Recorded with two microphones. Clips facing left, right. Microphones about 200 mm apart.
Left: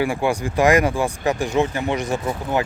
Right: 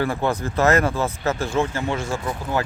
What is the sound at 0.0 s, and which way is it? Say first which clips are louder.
Speech: left 2 dB; 10° left (ahead or behind).